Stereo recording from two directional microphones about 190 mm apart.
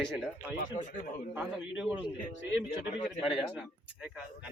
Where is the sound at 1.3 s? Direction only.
5° right (ahead or behind).